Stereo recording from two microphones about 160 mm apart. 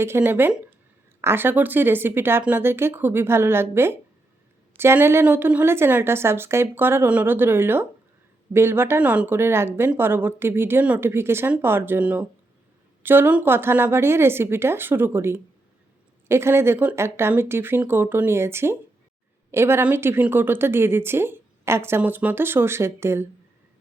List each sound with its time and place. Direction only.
0.0 s speech: 15° right (ahead or behind)